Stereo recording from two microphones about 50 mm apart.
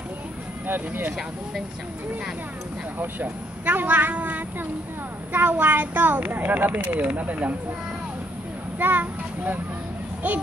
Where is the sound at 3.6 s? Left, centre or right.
Right.